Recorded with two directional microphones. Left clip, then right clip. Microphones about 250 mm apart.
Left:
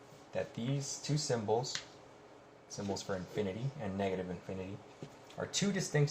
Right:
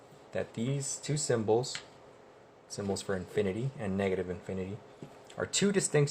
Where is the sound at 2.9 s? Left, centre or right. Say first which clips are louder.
Right 5 dB; right.